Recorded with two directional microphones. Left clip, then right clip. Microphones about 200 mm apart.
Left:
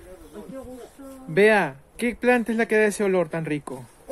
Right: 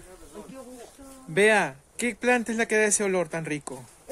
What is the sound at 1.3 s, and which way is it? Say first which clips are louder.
Speech: left 3 dB; centre (ahead or behind).